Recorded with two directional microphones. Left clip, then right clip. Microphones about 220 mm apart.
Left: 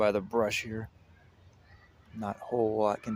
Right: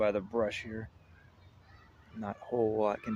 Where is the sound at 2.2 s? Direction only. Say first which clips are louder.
Left 2 dB; 15° left (ahead or behind).